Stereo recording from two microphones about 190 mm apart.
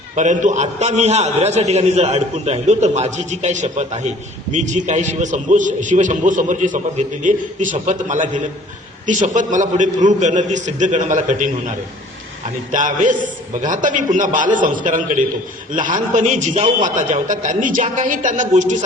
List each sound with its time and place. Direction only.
0.2 s a man's voice: 40° right (ahead or behind)
12.7 s a man's voice: 45° right (ahead or behind)